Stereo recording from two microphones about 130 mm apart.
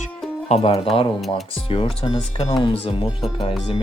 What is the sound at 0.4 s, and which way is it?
Speech, 50° left (ahead or behind).